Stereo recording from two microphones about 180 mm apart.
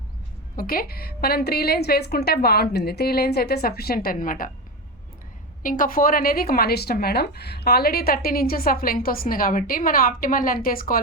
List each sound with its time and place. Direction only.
0.5 s a woman's voice: 55° left (ahead or behind)
5.6 s a woman's voice: 50° left (ahead or behind)